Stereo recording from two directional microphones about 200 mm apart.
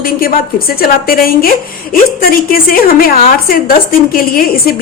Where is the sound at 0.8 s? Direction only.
50° left (ahead or behind).